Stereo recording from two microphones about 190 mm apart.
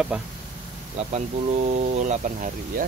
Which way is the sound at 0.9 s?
35° right (ahead or behind).